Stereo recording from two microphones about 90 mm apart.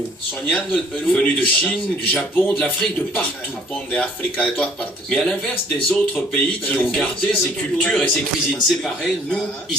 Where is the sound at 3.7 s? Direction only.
10° left (ahead or behind).